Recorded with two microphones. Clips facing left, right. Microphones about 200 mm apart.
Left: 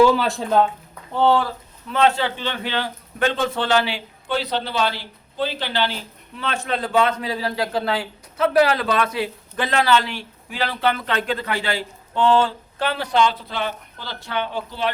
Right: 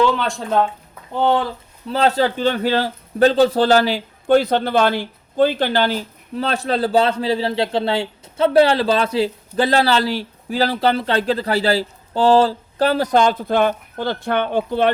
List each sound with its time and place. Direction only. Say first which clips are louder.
0.0 s speech: left 2 dB; 5° left (ahead or behind)
1.1 s speech: even; 15° right (ahead or behind)
1.9 s speech: right 2 dB; 35° right (ahead or behind); by 14.9 s 55° right (ahead or behind)